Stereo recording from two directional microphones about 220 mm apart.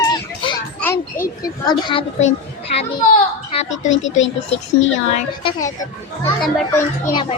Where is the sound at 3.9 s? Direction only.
60° left (ahead or behind).